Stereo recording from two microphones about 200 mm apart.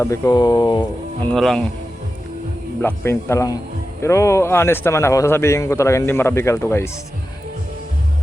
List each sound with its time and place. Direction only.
0.0 s speech: 15° left (ahead or behind)
1.2 s speech: 5° left (ahead or behind)
2.8 s speech: 10° left (ahead or behind)